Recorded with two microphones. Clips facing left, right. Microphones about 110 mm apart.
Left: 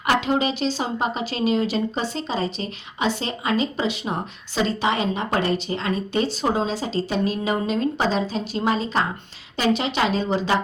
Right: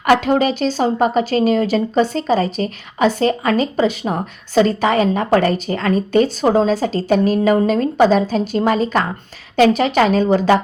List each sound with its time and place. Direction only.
0.0 s a woman's voice: 50° right (ahead or behind)